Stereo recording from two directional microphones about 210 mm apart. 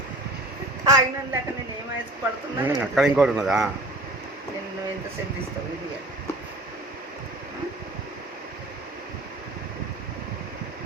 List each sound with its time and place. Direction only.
0.9 s a woman's voice: 15° right (ahead or behind)
2.6 s a man's voice: 5° right (ahead or behind)